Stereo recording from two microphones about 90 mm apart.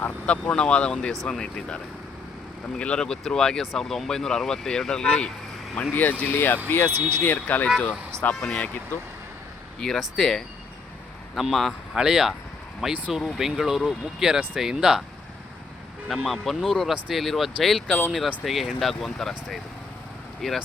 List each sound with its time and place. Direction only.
0.0 s speech: 15° left (ahead or behind)
10.0 s speech: 5° left (ahead or behind)
16.0 s speech: centre (ahead or behind)